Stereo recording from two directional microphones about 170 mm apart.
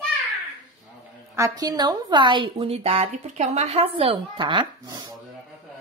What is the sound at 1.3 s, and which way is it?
A woman's voice, 20° right (ahead or behind).